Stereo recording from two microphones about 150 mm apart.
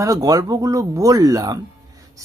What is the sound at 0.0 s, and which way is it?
Speech, 25° right (ahead or behind).